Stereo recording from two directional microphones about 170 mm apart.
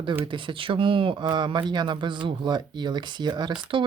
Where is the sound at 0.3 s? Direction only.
30° right (ahead or behind).